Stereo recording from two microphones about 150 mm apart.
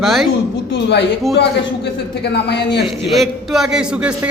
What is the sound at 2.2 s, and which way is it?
Speech, 90° left.